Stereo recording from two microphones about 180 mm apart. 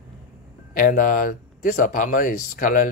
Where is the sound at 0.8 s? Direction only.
50° left (ahead or behind).